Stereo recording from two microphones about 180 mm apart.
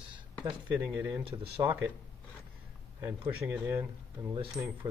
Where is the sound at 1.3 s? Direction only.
25° right (ahead or behind).